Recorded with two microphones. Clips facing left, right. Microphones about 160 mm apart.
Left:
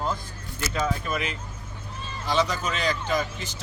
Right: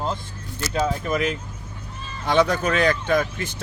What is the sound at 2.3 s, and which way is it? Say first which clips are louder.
Speech: right 6 dB; 60° right (ahead or behind).